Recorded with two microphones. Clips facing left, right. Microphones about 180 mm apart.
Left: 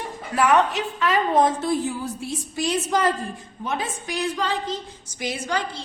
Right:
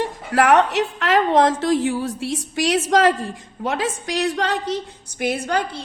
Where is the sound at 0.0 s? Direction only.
90° right.